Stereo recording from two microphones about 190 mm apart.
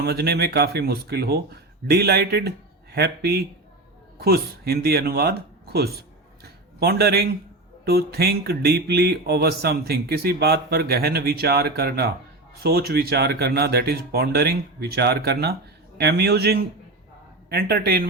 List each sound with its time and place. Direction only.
0.0 s music: 55° right (ahead or behind)